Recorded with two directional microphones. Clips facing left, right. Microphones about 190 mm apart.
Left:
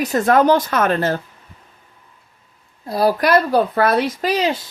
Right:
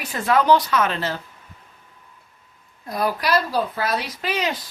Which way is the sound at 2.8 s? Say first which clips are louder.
Left 7 dB; 30° left (ahead or behind).